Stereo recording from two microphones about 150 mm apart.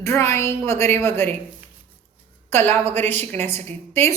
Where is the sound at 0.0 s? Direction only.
20° left (ahead or behind).